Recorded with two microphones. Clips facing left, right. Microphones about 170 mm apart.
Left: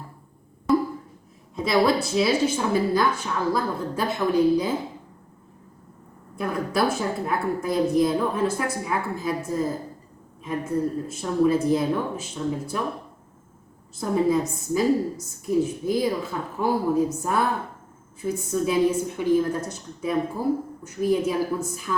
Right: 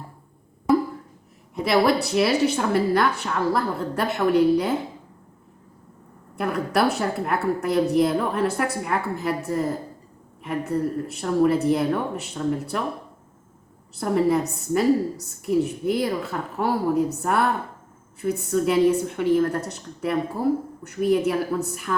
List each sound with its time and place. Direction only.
1.5 s a woman's voice: 65° right (ahead or behind)
6.3 s a woman's voice: 65° right (ahead or behind)
13.9 s a woman's voice: 70° right (ahead or behind)